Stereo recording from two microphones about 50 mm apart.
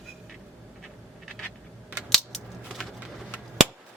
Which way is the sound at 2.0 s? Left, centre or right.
Centre.